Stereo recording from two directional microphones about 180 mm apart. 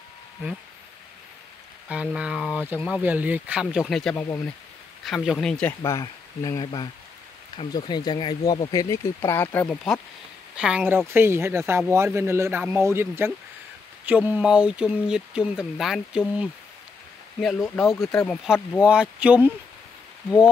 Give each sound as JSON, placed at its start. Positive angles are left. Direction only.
{"t": 1.9, "sound": "speech", "side_deg": -5}
{"t": 3.8, "sound": "speech", "side_deg": 5}
{"t": 5.7, "sound": "speech", "side_deg": 15}
{"t": 10.5, "sound": "speech", "side_deg": -5}
{"t": 17.7, "sound": "speech", "side_deg": 0}